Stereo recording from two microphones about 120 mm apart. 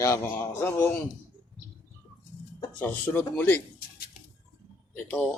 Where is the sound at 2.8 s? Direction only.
15° left (ahead or behind).